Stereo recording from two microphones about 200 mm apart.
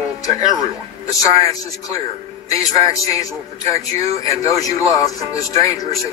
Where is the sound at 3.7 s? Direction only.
30° right (ahead or behind).